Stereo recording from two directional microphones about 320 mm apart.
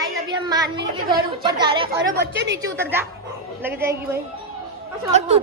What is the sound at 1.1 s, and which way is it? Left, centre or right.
A woman's voice, centre.